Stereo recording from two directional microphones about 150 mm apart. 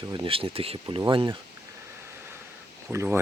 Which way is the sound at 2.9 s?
15° right (ahead or behind).